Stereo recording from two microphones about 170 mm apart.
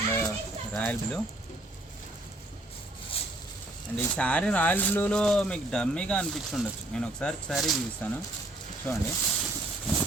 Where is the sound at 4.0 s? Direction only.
10° left (ahead or behind).